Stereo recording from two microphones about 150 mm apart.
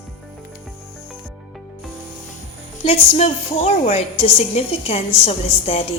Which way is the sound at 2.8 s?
40° left (ahead or behind).